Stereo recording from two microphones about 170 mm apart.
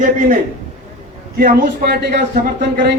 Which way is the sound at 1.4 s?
65° right (ahead or behind).